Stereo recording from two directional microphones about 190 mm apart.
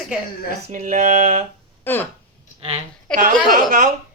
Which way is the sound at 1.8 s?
10° left (ahead or behind).